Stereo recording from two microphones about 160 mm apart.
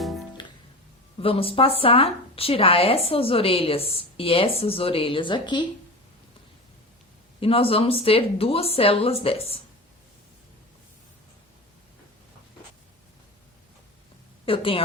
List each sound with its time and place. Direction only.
0.0 s music: centre (ahead or behind)
1.2 s speech: 35° left (ahead or behind)
7.3 s speech: 35° left (ahead or behind)
14.4 s a woman's voice: 35° left (ahead or behind)